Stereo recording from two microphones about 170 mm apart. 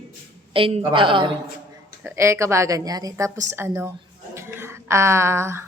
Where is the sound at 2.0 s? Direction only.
15° right (ahead or behind).